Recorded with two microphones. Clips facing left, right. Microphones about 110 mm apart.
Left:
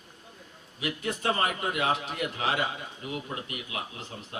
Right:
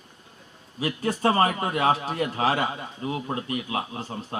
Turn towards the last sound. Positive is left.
turn(degrees=-35)  # may be behind; listen again after turning